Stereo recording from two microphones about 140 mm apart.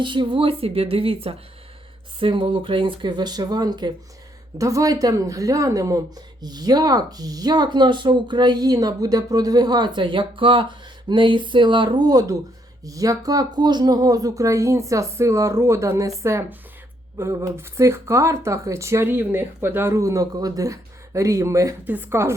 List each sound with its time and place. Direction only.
0.0 s speech: 35° right (ahead or behind); by 22.4 s 20° right (ahead or behind)